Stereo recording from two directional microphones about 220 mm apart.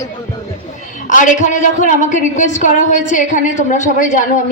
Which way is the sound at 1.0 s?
35° left (ahead or behind).